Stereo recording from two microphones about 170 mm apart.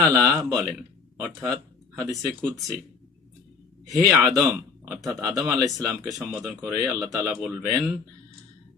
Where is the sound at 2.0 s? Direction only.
20° right (ahead or behind).